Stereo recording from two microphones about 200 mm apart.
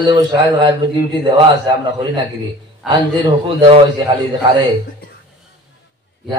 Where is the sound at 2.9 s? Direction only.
25° right (ahead or behind).